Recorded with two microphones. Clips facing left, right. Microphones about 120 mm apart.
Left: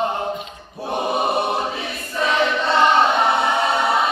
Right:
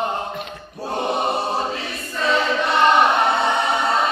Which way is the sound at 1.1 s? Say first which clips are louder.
Left 2 dB; 15° left (ahead or behind).